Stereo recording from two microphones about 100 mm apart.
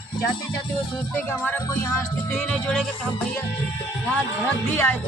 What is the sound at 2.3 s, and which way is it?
Music, 10° left (ahead or behind).